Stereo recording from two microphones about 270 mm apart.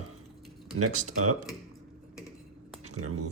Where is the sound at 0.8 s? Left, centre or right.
Right.